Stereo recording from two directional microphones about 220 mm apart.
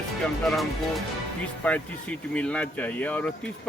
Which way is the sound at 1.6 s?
10° left (ahead or behind).